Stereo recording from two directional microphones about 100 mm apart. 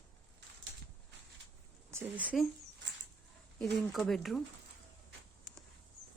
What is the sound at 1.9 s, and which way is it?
Speech, 15° right (ahead or behind).